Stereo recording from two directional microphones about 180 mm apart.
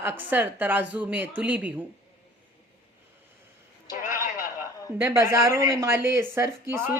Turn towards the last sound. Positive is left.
turn(degrees=-15)  # may be behind; listen again after turning